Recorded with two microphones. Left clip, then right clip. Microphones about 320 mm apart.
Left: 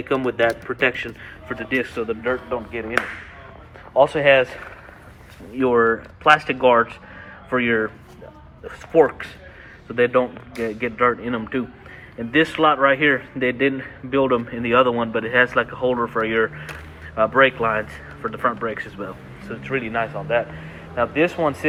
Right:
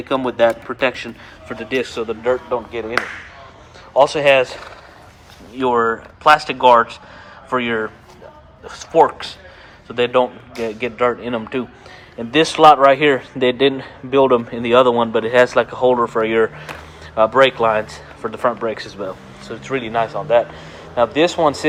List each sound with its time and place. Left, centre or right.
0.1 s speech: centre
3.9 s speech: centre
8.8 s speech: centre